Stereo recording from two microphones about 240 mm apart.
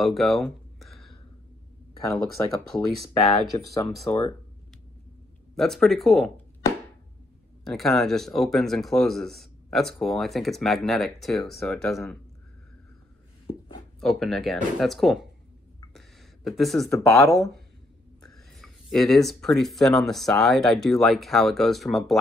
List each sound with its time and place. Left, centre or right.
0.0 s a sound: centre
2.7 s speech: centre
4.1 s speech: left
5.6 s speech: centre
7.6 s speech: centre
14.0 s speech: centre
16.4 s speech: centre